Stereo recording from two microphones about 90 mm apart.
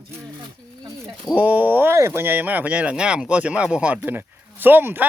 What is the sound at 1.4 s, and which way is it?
Speech, 20° right (ahead or behind).